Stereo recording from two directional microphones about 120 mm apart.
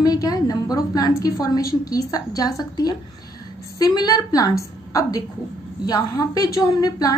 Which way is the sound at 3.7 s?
30° left (ahead or behind).